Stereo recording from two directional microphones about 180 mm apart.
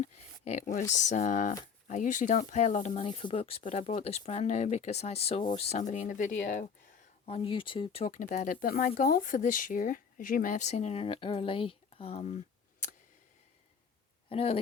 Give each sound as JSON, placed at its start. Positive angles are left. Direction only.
{"t": 0.0, "sound": "a sound", "side_deg": 40}
{"t": 0.9, "sound": "speech", "side_deg": 40}
{"t": 7.3, "sound": "speech", "side_deg": 30}
{"t": 14.3, "sound": "speech", "side_deg": 30}